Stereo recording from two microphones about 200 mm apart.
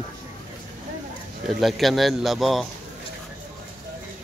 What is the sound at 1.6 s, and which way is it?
Speech, centre (ahead or behind).